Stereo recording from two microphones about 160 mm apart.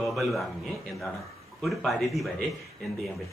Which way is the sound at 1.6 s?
Centre (ahead or behind).